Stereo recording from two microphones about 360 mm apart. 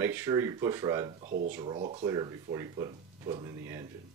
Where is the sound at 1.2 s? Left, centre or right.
Right.